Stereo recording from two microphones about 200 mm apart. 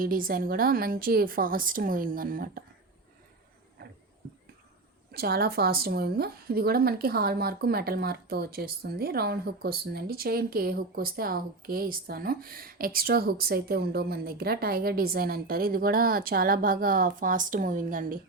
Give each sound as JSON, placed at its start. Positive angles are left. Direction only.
{"t": 0.0, "sound": "a woman's voice", "side_deg": -45}
{"t": 3.8, "sound": "a sound", "side_deg": -50}
{"t": 5.1, "sound": "a woman's voice", "side_deg": -50}